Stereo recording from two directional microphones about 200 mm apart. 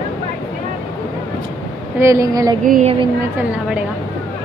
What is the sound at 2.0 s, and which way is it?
Speech, 15° right (ahead or behind).